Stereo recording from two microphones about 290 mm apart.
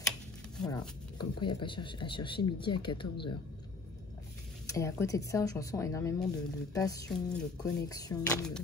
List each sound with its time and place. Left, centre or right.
0.6 s speech: centre
4.6 s speech: centre